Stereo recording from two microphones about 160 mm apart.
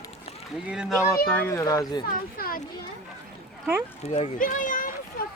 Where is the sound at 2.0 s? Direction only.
65° left (ahead or behind).